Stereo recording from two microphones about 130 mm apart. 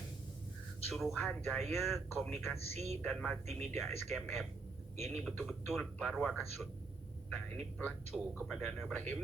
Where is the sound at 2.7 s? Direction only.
60° right (ahead or behind).